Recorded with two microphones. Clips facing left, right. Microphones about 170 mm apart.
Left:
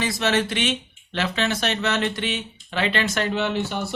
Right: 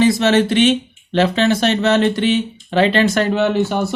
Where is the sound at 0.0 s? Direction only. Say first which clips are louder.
Right 9 dB; 25° right (ahead or behind).